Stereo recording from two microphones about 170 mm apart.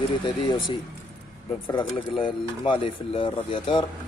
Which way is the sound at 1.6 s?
30° left (ahead or behind).